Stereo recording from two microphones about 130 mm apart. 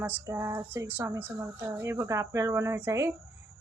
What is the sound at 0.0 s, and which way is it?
Speech, 15° right (ahead or behind).